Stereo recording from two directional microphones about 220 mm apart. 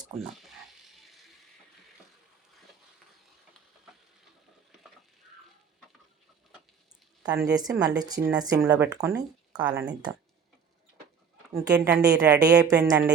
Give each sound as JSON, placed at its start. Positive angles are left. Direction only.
{"t": 0.2, "sound": "frying", "side_deg": 0}
{"t": 7.3, "sound": "speech", "side_deg": -5}
{"t": 7.5, "sound": "speech", "side_deg": -15}
{"t": 11.5, "sound": "speech", "side_deg": -10}
{"t": 12.4, "sound": "speech", "side_deg": -15}